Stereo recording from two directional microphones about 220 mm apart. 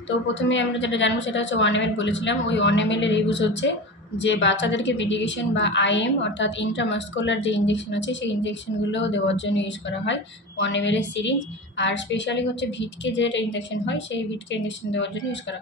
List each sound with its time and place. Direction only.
0.3 s a woman's voice: 55° left (ahead or behind)